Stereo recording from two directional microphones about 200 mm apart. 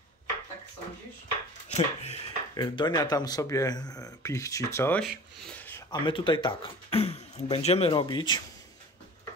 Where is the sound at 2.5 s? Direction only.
20° left (ahead or behind).